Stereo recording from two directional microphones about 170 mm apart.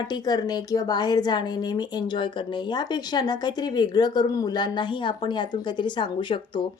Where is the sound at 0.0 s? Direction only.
25° left (ahead or behind).